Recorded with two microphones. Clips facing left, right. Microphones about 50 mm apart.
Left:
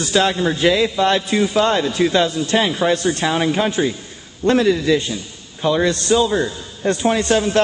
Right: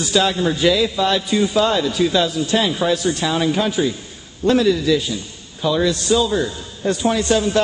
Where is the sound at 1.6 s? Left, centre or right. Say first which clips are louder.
Left 2 dB; left.